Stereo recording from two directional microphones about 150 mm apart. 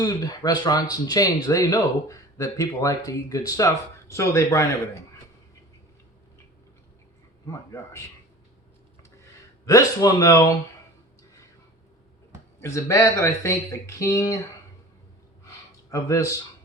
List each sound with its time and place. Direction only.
0.0 s speech: 25° left (ahead or behind)
7.4 s speech: 20° left (ahead or behind)
9.6 s speech: 25° left (ahead or behind)
12.5 s speech: 20° left (ahead or behind)
15.4 s a sound: 20° left (ahead or behind)